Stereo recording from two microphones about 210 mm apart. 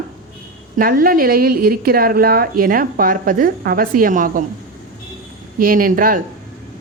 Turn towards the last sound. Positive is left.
turn(degrees=-40)  # may be behind; listen again after turning